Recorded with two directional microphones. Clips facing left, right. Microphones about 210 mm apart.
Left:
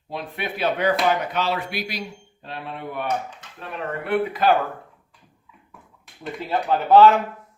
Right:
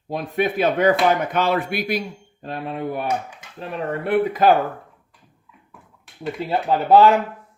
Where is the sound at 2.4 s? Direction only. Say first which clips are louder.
Right 6 dB; 40° right (ahead or behind).